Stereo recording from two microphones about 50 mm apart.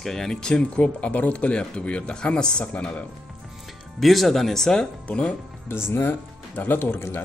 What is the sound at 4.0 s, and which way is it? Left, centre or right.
Speech, centre.